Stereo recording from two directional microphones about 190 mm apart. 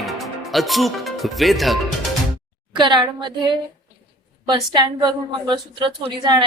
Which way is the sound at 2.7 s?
25° right (ahead or behind).